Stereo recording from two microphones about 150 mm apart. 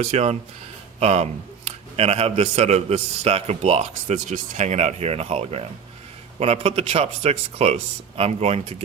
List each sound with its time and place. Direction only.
0.0 s a man's voice: 45° right (ahead or behind)